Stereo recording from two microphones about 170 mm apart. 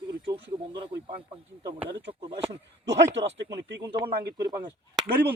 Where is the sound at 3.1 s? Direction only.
90° right.